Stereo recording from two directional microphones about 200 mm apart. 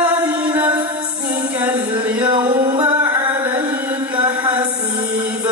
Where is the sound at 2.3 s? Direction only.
20° right (ahead or behind).